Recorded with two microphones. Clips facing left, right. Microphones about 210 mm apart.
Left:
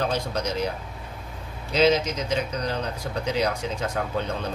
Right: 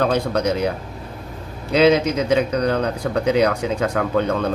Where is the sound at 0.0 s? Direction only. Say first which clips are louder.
Right 8 dB; 60° right (ahead or behind).